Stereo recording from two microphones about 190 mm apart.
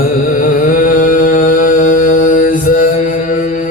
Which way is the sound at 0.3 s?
45° left (ahead or behind).